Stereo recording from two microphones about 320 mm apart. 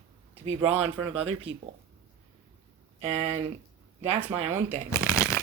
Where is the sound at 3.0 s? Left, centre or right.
Centre.